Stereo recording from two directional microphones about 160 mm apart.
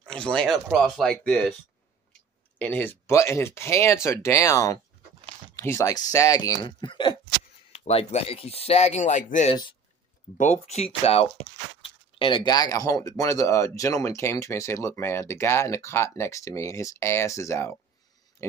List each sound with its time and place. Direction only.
0.0 s speech: 5° left (ahead or behind)
2.6 s speech: 10° left (ahead or behind); by 9.5 s 50° left (ahead or behind)
9.5 s speech: 30° left (ahead or behind)
10.3 s speech: 50° left (ahead or behind); by 17.7 s 20° left (ahead or behind)